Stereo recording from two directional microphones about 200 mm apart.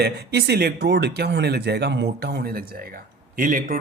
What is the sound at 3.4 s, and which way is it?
Speech, 45° right (ahead or behind).